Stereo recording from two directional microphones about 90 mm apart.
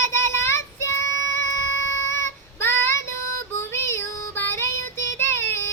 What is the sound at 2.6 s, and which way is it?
Child singing, 25° left (ahead or behind).